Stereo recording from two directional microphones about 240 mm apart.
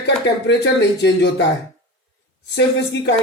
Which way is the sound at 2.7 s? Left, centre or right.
Left.